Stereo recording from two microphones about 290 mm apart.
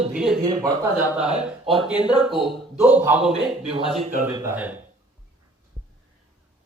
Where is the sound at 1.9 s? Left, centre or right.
Centre.